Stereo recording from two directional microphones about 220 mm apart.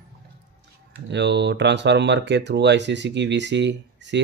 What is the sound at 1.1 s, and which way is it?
Speech, 50° right (ahead or behind).